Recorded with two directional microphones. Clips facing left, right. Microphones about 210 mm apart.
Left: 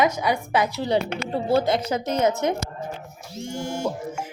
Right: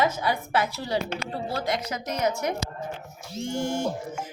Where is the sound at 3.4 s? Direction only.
25° right (ahead or behind).